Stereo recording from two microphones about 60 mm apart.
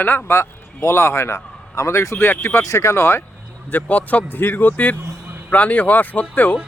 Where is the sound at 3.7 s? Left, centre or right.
Left.